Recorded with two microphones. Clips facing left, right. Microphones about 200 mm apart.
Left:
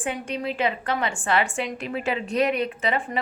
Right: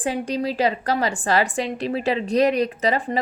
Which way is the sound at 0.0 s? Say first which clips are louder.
Right 5 dB; 35° right (ahead or behind).